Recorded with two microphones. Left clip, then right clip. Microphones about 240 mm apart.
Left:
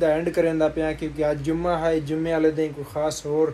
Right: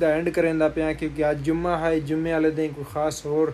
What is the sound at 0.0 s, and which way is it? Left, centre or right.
Speech, centre.